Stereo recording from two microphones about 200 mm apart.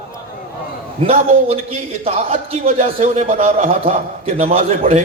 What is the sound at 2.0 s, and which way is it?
A man's voice, 30° right (ahead or behind).